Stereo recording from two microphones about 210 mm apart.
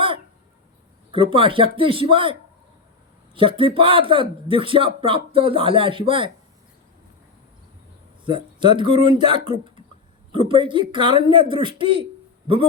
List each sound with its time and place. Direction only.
1.1 s a man's voice: 25° right (ahead or behind)
3.3 s a man's voice: 25° right (ahead or behind)
8.2 s a man's voice: 25° right (ahead or behind)